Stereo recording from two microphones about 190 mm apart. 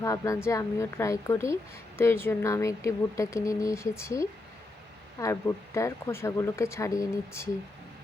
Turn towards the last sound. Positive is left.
turn(degrees=15)  # may be behind; listen again after turning